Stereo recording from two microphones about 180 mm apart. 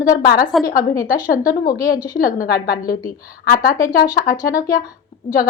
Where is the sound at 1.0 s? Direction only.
50° left (ahead or behind).